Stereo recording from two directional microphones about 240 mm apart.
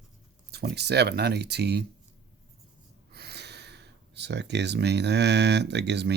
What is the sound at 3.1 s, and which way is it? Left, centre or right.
Speech, right.